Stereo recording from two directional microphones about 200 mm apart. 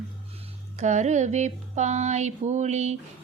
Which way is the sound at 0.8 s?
35° right (ahead or behind).